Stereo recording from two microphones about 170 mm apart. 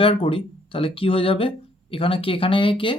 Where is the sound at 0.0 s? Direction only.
30° left (ahead or behind).